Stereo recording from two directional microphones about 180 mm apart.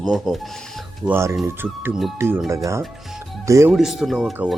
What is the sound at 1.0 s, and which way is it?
Speech, 15° right (ahead or behind).